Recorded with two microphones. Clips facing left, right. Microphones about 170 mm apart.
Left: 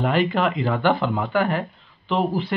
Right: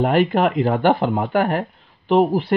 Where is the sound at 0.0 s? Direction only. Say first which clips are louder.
Right 4 dB; 50° right (ahead or behind).